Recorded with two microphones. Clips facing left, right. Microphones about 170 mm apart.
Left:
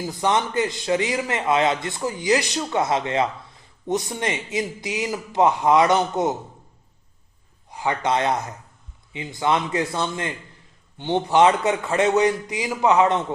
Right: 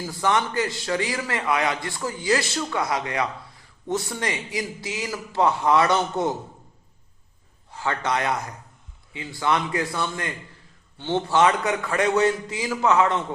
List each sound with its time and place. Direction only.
0.0 s a man's voice: 20° left (ahead or behind)
7.7 s a man's voice: 15° left (ahead or behind)